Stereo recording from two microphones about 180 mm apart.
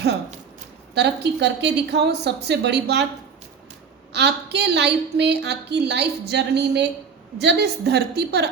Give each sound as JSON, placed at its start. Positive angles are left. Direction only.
{"t": 0.9, "sound": "a woman's voice", "side_deg": -70}
{"t": 4.1, "sound": "a woman's voice", "side_deg": -70}